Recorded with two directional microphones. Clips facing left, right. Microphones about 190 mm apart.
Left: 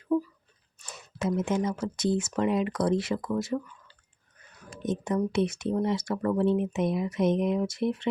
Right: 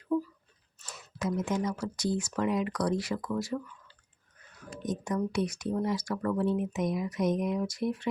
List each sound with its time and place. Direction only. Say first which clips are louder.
0.1 s a sound: left 3 dB; 20° left (ahead or behind)
0.8 s speech: left 3 dB; 25° left (ahead or behind)
4.8 s speech: left 4 dB; 25° left (ahead or behind)